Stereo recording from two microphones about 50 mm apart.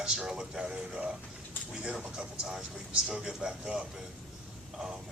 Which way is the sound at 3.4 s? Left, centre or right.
Centre.